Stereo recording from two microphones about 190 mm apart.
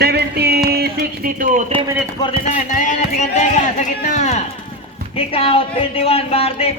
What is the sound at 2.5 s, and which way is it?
Speech, 40° left (ahead or behind).